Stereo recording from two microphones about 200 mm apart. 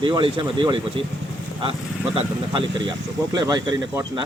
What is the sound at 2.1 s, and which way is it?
A man's voice, 25° right (ahead or behind).